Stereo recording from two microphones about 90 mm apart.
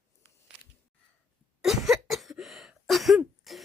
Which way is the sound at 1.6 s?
5° right (ahead or behind).